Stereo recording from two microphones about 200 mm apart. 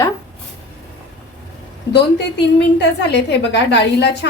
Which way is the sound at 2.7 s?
55° left (ahead or behind).